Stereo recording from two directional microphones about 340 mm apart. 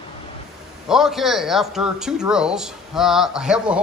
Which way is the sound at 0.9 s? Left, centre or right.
Centre.